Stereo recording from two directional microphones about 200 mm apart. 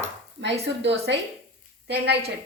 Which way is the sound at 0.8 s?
60° right (ahead or behind).